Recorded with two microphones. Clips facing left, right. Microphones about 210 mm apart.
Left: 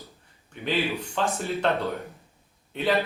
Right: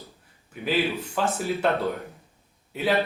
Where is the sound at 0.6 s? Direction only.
5° right (ahead or behind).